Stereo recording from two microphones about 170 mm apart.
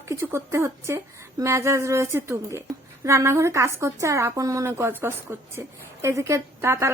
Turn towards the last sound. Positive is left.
turn(degrees=-15)  # may be behind; listen again after turning